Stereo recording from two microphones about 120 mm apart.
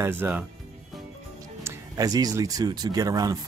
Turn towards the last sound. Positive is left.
turn(degrees=-30)  # may be behind; listen again after turning